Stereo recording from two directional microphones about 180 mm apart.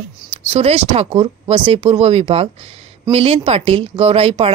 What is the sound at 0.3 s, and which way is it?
Speech, 35° right (ahead or behind).